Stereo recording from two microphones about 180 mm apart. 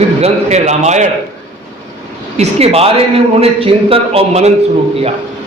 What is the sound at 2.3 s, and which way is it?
A man's voice, 35° right (ahead or behind).